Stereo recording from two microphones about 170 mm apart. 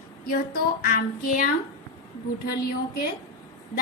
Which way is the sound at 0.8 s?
55° left (ahead or behind).